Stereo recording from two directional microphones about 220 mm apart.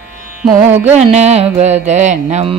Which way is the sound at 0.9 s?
30° right (ahead or behind).